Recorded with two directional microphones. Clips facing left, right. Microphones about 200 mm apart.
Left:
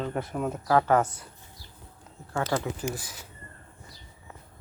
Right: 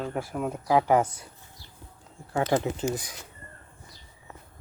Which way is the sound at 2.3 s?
20° right (ahead or behind).